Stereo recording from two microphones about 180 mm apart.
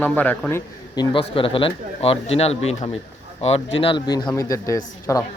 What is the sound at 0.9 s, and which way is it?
A man's voice, 30° left (ahead or behind).